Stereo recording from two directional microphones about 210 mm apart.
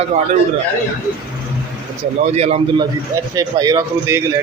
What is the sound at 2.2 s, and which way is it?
Speech, 30° right (ahead or behind).